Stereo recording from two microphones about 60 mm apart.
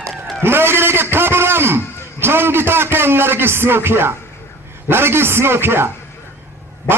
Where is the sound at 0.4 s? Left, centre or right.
Right.